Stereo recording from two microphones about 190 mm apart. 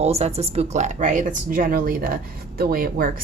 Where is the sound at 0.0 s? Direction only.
35° right (ahead or behind).